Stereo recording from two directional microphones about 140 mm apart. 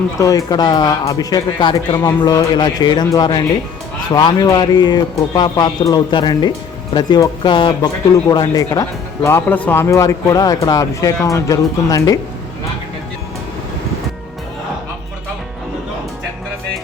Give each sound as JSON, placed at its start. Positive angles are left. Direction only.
{"t": 0.2, "sound": "speech", "side_deg": 25}